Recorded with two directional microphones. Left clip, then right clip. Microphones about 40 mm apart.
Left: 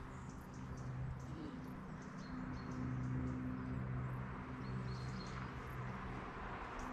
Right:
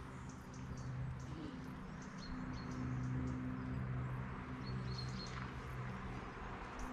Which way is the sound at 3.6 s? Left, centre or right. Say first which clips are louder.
Even; left.